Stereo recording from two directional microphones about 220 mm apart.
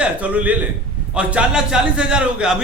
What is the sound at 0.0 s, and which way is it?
A man's voice, 5° right (ahead or behind).